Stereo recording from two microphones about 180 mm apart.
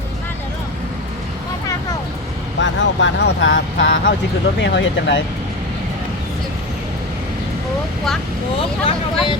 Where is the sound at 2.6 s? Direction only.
80° left.